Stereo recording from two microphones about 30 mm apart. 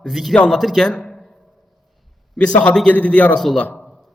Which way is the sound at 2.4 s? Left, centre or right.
Left.